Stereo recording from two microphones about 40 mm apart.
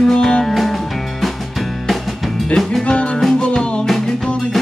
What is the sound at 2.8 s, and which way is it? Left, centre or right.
Music, left.